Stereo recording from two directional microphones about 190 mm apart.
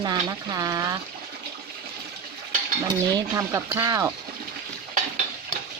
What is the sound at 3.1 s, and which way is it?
Speech, 15° right (ahead or behind).